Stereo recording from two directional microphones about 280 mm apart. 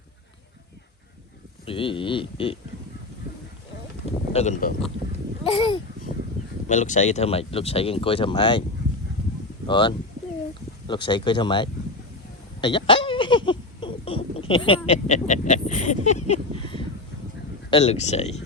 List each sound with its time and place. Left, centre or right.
1.6 s speech: centre
4.3 s speech: left
6.7 s speech: left
9.6 s speech: centre
12.6 s a sound: centre
17.7 s speech: left